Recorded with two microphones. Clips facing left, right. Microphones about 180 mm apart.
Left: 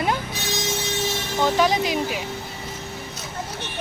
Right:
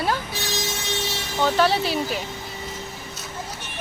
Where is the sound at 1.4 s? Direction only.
15° left (ahead or behind).